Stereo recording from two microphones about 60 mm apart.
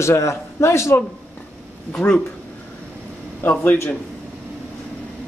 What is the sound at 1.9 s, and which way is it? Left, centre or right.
Speech, centre.